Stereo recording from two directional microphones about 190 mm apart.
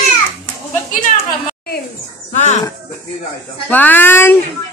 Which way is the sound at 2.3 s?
35° left (ahead or behind).